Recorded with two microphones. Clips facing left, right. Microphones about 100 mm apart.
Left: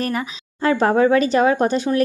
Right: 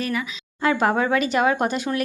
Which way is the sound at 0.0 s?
40° left (ahead or behind).